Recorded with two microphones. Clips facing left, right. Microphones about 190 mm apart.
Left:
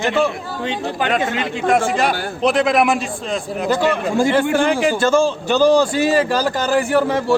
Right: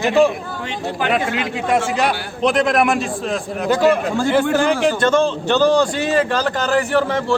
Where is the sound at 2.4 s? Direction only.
Centre (ahead or behind).